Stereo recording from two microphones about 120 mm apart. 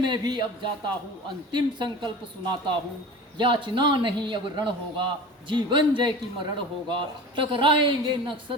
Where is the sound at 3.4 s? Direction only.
40° right (ahead or behind).